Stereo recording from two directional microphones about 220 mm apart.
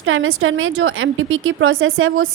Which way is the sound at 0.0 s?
65° right (ahead or behind).